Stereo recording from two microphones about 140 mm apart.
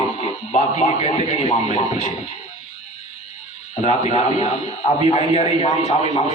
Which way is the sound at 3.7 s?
55° left (ahead or behind).